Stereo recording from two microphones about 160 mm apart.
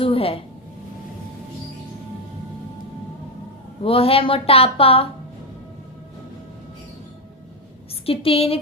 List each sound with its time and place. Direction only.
0.0 s a woman's voice: 35° left (ahead or behind)
3.8 s speech: 35° left (ahead or behind)
8.0 s speech: 35° left (ahead or behind)